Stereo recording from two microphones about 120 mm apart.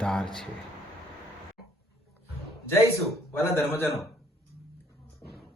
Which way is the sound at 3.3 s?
20° left (ahead or behind).